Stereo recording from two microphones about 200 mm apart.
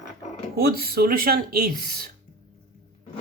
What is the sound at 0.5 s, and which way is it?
Speech, 50° right (ahead or behind).